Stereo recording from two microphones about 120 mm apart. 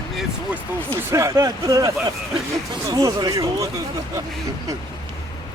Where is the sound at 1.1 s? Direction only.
25° right (ahead or behind).